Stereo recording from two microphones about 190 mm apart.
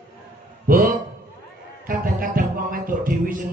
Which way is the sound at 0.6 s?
45° right (ahead or behind).